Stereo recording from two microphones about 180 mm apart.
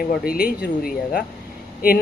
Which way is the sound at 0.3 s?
60° left (ahead or behind).